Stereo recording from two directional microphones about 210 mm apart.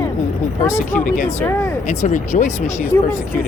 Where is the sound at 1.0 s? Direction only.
40° left (ahead or behind).